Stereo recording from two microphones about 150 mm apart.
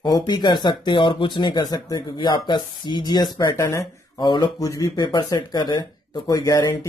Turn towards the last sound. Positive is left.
turn(degrees=25)  # may be behind; listen again after turning